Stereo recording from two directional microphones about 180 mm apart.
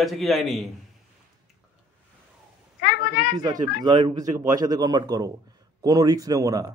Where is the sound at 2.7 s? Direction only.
60° left (ahead or behind).